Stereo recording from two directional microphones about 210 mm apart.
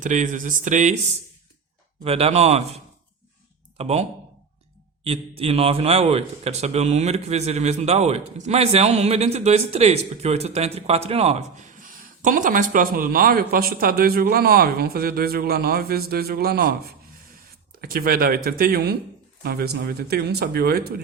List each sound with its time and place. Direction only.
0.0 s a man's voice: 35° right (ahead or behind)
2.0 s a man's voice: 30° right (ahead or behind)
5.0 s a man's voice: 25° right (ahead or behind); by 20.9 s 50° right (ahead or behind)